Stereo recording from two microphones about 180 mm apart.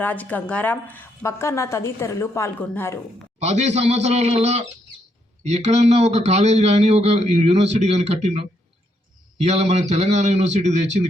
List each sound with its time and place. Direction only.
0.0 s a woman's voice: 10° left (ahead or behind)
3.4 s a man's voice: 40° right (ahead or behind)